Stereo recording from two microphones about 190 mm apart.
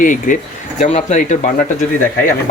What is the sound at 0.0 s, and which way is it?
Speech, 45° left (ahead or behind).